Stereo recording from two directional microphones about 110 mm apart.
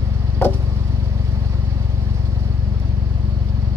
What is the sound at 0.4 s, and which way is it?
Vehicle, 20° left (ahead or behind).